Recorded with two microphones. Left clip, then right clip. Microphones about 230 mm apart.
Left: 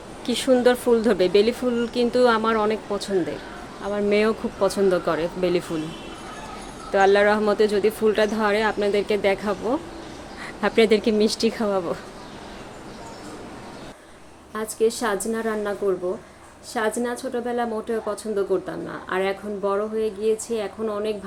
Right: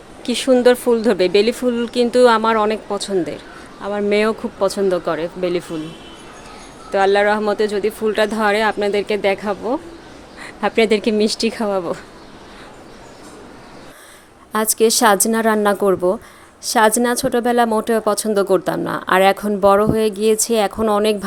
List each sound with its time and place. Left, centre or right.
0.3 s speech: right
6.9 s speech: centre
14.5 s speech: right